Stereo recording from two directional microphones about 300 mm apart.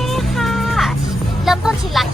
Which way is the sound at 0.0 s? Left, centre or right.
Centre.